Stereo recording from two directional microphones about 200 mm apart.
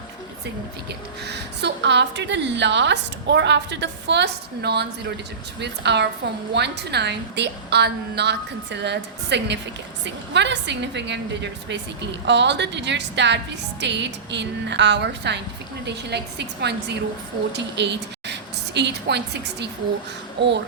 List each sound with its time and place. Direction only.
0.9 s a woman's voice: 55° right (ahead or behind)
12.2 s a woman's voice: 60° right (ahead or behind)